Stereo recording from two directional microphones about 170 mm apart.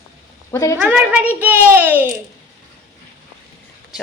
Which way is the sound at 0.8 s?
10° right (ahead or behind).